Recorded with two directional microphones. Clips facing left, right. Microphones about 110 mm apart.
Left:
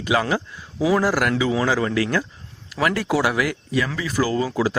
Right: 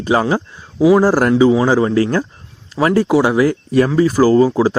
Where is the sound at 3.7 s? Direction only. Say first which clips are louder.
Right 10 dB; 40° right (ahead or behind).